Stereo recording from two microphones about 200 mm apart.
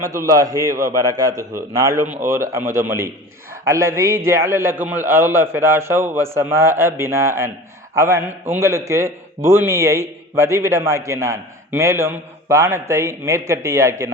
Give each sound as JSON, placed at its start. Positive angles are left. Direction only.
{"t": 0.0, "sound": "a man's voice", "side_deg": -15}